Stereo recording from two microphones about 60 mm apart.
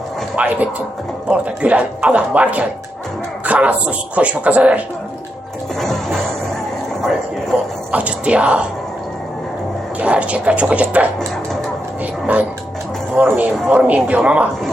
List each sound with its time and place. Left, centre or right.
0.3 s a man's voice: right
5.8 s music: centre
7.9 s speech: right
10.0 s a man's voice: right
12.2 s a man's voice: right